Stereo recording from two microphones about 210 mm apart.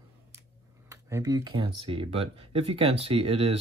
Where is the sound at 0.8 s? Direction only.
15° right (ahead or behind).